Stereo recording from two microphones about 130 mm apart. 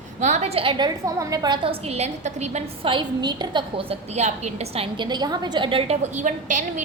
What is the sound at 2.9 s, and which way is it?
A woman's voice, 35° right (ahead or behind).